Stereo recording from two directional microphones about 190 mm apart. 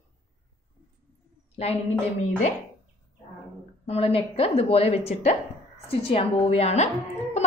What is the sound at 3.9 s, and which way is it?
A woman's voice, 30° left (ahead or behind).